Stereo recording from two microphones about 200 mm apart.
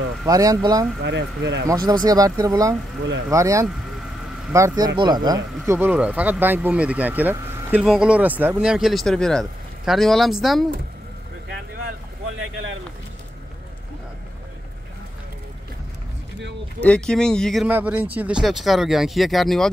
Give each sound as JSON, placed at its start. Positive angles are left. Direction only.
{"t": 0.3, "sound": "speech", "side_deg": -15}
{"t": 1.0, "sound": "speech", "side_deg": -60}
{"t": 1.7, "sound": "speech", "side_deg": -20}
{"t": 16.8, "sound": "speech", "side_deg": 5}